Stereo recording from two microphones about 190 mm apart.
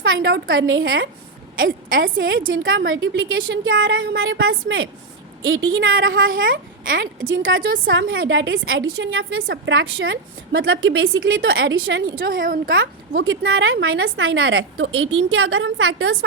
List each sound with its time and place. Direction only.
0.0 s a woman's voice: 80° right